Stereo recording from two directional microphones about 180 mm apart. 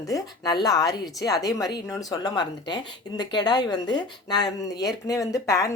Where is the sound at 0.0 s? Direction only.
20° left (ahead or behind).